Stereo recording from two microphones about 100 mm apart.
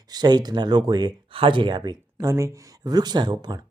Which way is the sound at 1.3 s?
60° right (ahead or behind).